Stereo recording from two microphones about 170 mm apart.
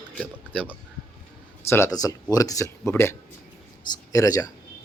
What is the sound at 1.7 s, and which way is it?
Speech, 15° left (ahead or behind).